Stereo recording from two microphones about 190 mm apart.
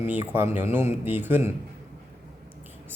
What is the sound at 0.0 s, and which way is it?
Speech, 10° right (ahead or behind).